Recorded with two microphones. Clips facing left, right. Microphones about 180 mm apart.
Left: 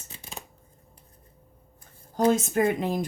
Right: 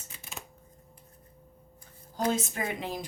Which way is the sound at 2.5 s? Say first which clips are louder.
Left 10 dB; 50° left (ahead or behind).